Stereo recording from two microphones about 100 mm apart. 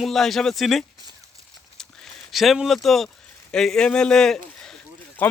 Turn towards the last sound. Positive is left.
turn(degrees=15)  # may be behind; listen again after turning